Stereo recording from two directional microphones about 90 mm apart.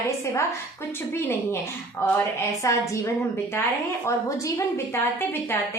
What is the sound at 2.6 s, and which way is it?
A woman's voice, 35° left (ahead or behind).